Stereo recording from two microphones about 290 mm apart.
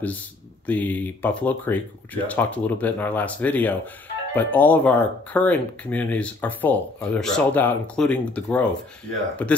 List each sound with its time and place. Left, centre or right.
0.7 s speech: centre